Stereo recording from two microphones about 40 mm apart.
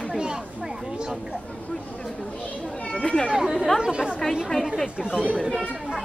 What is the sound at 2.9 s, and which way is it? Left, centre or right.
Speech, left.